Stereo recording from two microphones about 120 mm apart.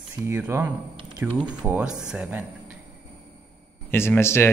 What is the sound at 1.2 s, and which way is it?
Speech, 10° right (ahead or behind).